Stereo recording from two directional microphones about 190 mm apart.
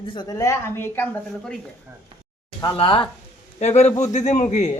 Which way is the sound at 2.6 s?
25° left (ahead or behind).